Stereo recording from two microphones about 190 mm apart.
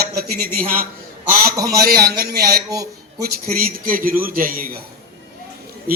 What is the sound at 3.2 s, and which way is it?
Speech, 50° right (ahead or behind).